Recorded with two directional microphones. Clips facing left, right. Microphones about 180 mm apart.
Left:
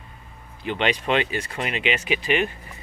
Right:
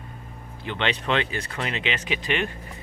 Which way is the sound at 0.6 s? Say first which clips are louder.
Left 3 dB; 15° left (ahead or behind).